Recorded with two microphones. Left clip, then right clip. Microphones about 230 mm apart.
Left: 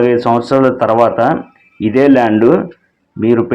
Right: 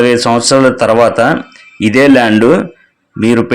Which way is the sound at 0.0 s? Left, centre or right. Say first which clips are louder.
Right 2 dB; right.